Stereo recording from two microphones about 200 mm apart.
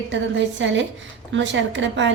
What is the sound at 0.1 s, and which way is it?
A woman's voice, 65° right (ahead or behind).